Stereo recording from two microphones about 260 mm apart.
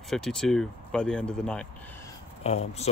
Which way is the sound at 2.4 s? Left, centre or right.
Left.